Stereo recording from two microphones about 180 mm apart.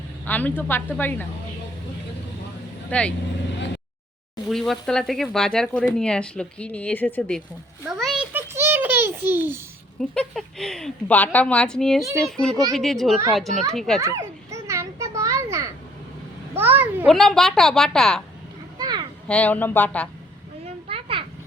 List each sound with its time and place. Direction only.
0.3 s speech: 10° left (ahead or behind)
2.9 s speech: 10° left (ahead or behind)
4.4 s speech: centre (ahead or behind)
7.9 s a sound: centre (ahead or behind)
10.0 s speech: 5° left (ahead or behind)
14.0 s children playing: 15° right (ahead or behind)
16.6 s a sound: 10° right (ahead or behind)
17.1 s speech: centre (ahead or behind)
18.8 s a sound: 20° right (ahead or behind)
19.3 s speech: 10° left (ahead or behind)
20.8 s children playing: 30° right (ahead or behind)